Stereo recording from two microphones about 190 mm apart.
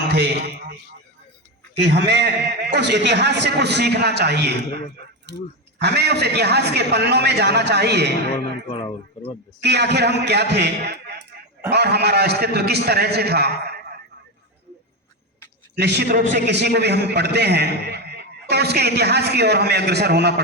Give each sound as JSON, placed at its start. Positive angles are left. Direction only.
{"t": 0.1, "sound": "a man's voice", "side_deg": -60}
{"t": 5.8, "sound": "a man's voice", "side_deg": -60}
{"t": 8.3, "sound": "a sound", "side_deg": 30}
{"t": 9.6, "sound": "a man's voice", "side_deg": -60}
{"t": 15.7, "sound": "a man's voice", "side_deg": -60}